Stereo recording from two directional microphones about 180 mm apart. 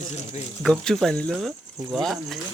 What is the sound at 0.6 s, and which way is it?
Speech, 5° left (ahead or behind).